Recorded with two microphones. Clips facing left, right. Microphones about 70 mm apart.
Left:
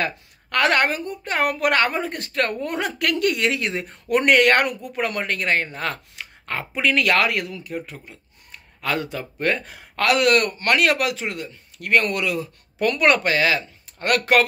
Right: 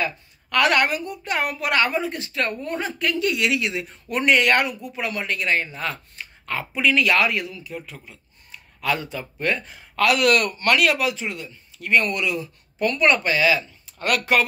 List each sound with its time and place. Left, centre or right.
0.6 s speech: left
2.6 s speech: left
3.9 s speech: left
6.2 s a sound: left
6.8 s speech: left
9.2 s speech: left
9.9 s speech: left
11.0 s speech: left
12.8 s speech: left